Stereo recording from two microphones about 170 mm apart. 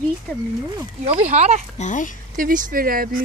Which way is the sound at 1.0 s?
40° right (ahead or behind).